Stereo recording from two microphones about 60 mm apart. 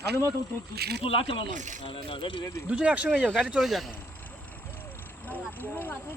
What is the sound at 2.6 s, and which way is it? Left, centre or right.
Speech, centre.